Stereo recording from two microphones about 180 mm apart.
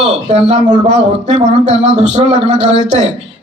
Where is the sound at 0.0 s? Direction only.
35° right (ahead or behind).